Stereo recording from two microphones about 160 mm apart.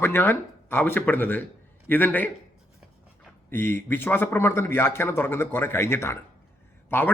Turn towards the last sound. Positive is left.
turn(degrees=15)  # may be behind; listen again after turning